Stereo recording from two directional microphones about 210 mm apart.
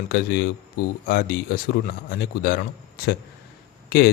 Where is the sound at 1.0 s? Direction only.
45° left (ahead or behind).